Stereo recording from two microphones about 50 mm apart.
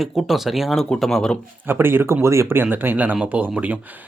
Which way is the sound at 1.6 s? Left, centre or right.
Right.